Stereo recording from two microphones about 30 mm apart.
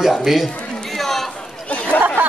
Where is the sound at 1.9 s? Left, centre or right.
Left.